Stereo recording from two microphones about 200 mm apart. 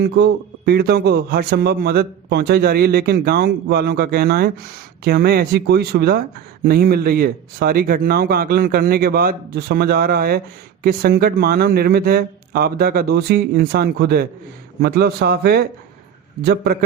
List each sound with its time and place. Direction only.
0.0 s a man's voice: 50° right (ahead or behind)